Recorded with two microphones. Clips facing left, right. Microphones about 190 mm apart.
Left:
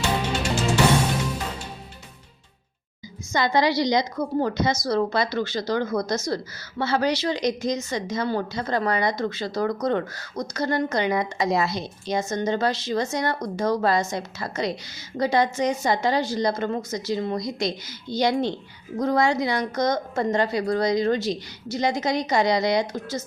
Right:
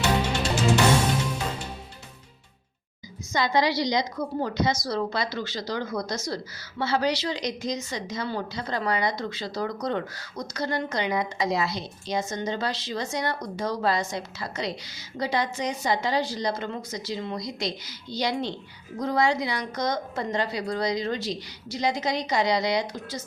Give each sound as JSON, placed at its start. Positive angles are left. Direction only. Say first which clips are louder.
{"t": 3.3, "sound": "a woman's voice", "louder": "left 3 dB", "side_deg": 50}